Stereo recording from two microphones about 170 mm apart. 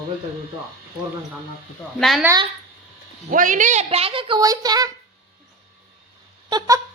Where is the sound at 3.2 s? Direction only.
50° right (ahead or behind); by 4.9 s 20° right (ahead or behind).